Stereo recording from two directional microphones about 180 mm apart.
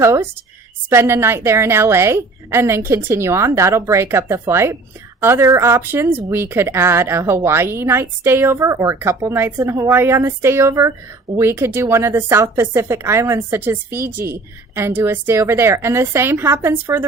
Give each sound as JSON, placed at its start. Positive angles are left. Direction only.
{"t": 0.0, "sound": "a woman's voice", "side_deg": -15}